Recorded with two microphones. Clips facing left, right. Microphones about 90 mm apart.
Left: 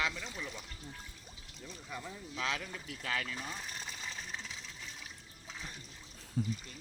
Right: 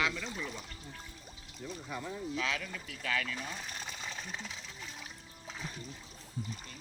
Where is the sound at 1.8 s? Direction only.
5° right (ahead or behind).